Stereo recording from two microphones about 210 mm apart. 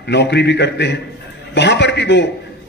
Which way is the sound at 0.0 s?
55° left (ahead or behind).